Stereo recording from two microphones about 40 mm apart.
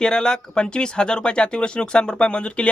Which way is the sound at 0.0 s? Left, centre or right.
Centre.